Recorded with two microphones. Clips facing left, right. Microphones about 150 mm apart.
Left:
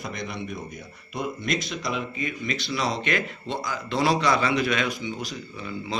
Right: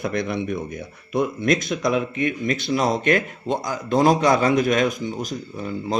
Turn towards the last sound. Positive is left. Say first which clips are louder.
# right 6 dB
turn(degrees=-45)  # may be behind; listen again after turning